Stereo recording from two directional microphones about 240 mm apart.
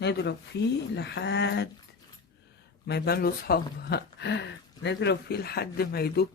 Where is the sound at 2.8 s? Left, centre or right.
Left.